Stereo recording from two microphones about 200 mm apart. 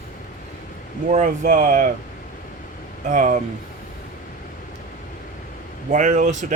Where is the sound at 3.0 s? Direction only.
40° right (ahead or behind).